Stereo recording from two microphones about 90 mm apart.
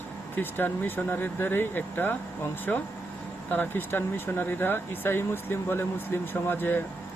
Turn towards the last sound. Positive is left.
turn(degrees=25)  # may be behind; listen again after turning